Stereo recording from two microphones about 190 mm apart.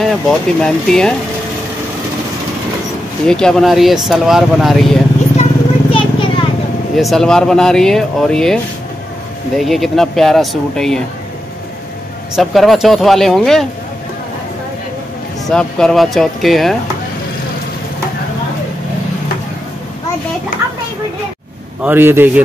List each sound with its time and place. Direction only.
0.0 s speech: centre (ahead or behind)
3.3 s speech: 5° left (ahead or behind)
5.4 s vehicle: 30° left (ahead or behind)
7.0 s speech: centre (ahead or behind)
9.6 s speech: centre (ahead or behind)
12.4 s speech: centre (ahead or behind)
15.4 s speech: 5° left (ahead or behind)
21.8 s speech: 10° right (ahead or behind)